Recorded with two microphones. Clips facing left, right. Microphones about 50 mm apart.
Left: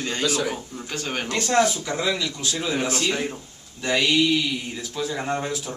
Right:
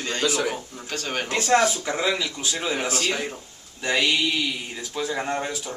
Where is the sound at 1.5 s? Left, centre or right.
Centre.